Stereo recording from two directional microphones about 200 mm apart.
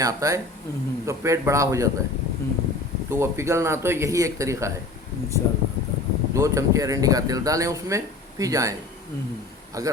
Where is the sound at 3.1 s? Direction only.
15° right (ahead or behind).